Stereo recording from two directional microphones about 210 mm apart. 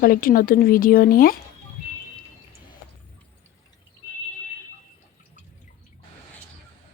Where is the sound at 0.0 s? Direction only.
45° left (ahead or behind).